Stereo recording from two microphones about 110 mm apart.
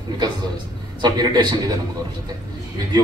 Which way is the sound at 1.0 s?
35° right (ahead or behind).